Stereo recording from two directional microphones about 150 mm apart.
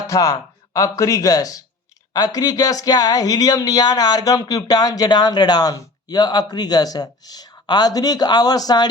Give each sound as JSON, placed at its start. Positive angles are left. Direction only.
{"t": 0.1, "sound": "speech", "side_deg": 20}